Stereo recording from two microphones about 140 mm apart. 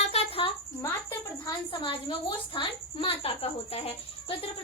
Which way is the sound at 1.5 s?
35° left (ahead or behind).